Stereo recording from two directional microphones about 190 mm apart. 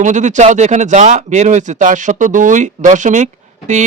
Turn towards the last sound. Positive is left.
turn(degrees=-40)  # may be behind; listen again after turning